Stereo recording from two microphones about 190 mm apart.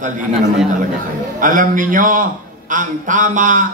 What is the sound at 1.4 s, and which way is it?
A man's voice, 45° right (ahead or behind).